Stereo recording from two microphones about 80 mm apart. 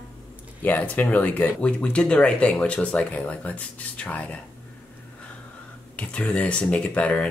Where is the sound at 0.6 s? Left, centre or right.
Left.